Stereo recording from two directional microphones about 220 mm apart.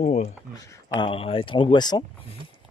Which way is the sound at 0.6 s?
15° left (ahead or behind).